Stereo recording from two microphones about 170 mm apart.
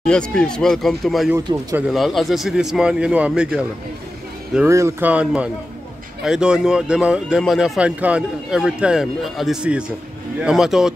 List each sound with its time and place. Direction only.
0.0 s speech: 5° left (ahead or behind)
1.3 s speech: 20° right (ahead or behind)
1.8 s speech: centre (ahead or behind)
4.6 s speech: 15° right (ahead or behind)